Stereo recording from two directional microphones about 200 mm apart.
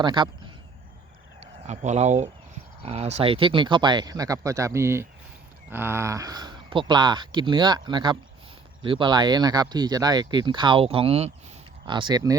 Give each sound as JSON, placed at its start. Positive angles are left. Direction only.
{"t": 0.0, "sound": "speech", "side_deg": -25}
{"t": 1.4, "sound": "speech", "side_deg": -35}